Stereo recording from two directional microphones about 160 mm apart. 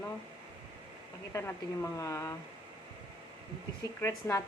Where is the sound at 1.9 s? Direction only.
20° left (ahead or behind).